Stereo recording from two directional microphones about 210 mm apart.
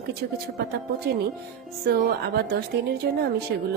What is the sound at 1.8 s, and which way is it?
Speech, 50° right (ahead or behind).